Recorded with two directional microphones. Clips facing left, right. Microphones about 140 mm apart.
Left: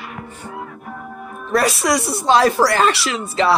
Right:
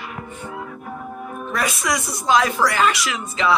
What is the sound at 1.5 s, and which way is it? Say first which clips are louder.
Speech: left 7 dB; 35° left (ahead or behind).